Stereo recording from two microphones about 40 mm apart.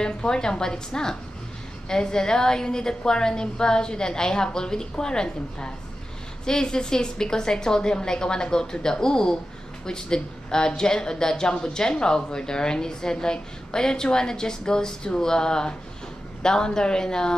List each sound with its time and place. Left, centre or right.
0.0 s a woman's voice: centre